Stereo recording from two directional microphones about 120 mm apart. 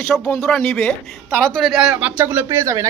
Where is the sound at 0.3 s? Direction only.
5° left (ahead or behind).